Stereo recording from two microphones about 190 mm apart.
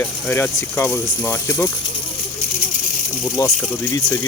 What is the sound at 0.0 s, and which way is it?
Speech, 10° left (ahead or behind).